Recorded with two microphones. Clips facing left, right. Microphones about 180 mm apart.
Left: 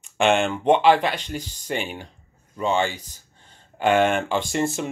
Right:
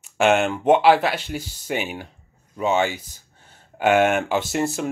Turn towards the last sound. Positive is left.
turn(degrees=-5)  # may be behind; listen again after turning